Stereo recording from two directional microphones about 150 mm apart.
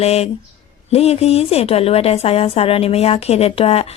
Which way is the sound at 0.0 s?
45° left (ahead or behind).